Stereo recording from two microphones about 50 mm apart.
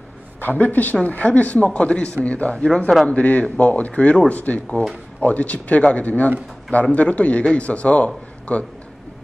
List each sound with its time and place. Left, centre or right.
0.4 s a woman's voice: left